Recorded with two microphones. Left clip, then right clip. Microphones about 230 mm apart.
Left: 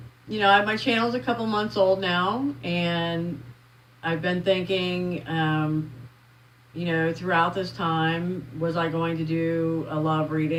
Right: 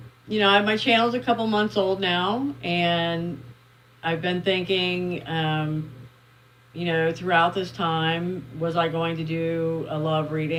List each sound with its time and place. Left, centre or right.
0.3 s speech: right
6.7 s speech: right